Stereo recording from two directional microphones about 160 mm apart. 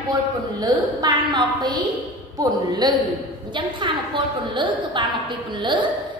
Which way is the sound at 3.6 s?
30° right (ahead or behind).